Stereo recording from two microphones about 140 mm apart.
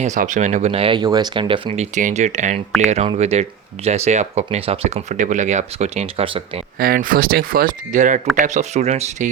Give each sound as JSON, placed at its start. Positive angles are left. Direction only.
{"t": 0.0, "sound": "speech", "side_deg": -60}
{"t": 1.8, "sound": "speech", "side_deg": -60}
{"t": 6.7, "sound": "speech", "side_deg": -90}